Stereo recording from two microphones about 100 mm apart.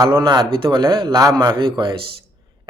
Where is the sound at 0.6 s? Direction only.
55° right (ahead or behind).